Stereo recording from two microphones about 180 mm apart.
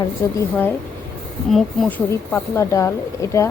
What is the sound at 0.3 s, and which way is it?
Speech, 10° left (ahead or behind).